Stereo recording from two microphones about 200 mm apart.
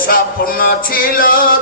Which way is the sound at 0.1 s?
45° left (ahead or behind).